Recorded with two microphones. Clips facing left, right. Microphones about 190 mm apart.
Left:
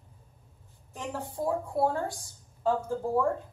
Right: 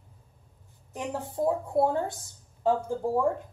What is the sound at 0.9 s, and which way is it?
A woman's voice, 15° right (ahead or behind).